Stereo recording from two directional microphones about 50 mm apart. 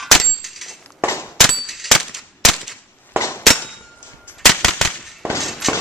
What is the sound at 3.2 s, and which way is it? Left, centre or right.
Clang, left.